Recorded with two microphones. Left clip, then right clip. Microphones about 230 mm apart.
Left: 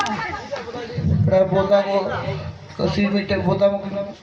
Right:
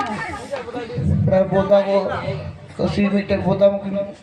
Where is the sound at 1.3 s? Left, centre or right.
Right.